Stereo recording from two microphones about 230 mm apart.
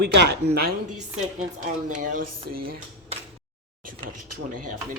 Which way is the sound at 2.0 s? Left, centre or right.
Right.